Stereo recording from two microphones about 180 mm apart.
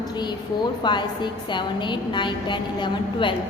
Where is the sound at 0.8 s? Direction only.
25° left (ahead or behind).